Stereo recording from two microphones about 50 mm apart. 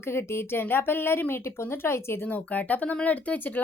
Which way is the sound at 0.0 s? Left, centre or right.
Left.